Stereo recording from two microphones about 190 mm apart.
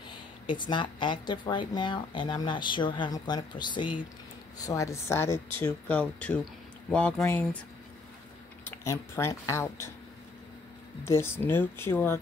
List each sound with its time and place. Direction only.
0.1 s speech: 25° left (ahead or behind); by 7.4 s 5° left (ahead or behind)
8.6 s speech: 10° left (ahead or behind)
11.1 s speech: 15° left (ahead or behind)